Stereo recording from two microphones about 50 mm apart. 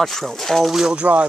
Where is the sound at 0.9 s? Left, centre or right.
Right.